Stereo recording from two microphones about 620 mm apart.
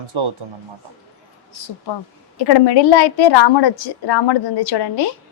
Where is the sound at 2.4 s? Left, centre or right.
Left.